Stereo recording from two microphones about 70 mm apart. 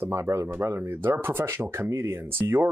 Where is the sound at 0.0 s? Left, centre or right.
Right.